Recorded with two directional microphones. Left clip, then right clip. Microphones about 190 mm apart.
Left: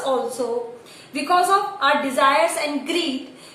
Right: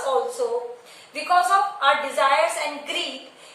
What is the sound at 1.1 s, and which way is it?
A woman's voice, 15° left (ahead or behind).